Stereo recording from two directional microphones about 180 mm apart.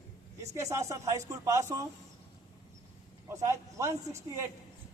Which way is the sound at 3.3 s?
15° right (ahead or behind).